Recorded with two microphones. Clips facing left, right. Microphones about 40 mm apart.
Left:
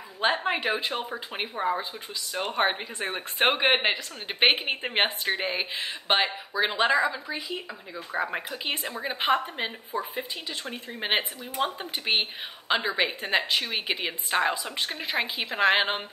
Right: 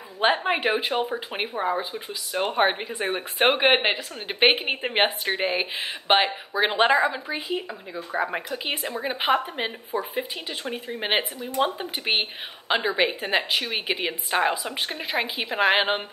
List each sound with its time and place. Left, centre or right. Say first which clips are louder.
0.2 s a sound: right 3 dB; centre
0.6 s speech: right 4 dB; right
8.1 s speech: right 3 dB; centre